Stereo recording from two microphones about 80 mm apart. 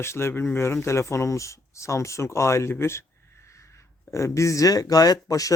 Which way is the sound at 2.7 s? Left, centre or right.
Left.